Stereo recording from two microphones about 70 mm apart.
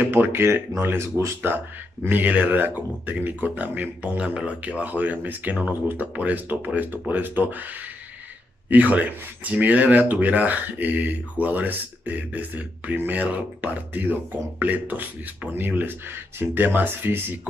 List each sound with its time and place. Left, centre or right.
0.0 s speech: right
2.0 s speech: right